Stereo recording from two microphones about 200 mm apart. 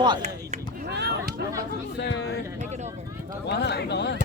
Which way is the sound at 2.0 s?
55° left (ahead or behind).